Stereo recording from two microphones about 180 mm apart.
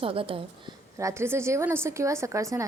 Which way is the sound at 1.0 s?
15° right (ahead or behind).